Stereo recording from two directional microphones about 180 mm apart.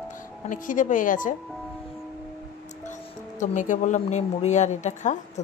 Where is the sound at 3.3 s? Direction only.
45° left (ahead or behind).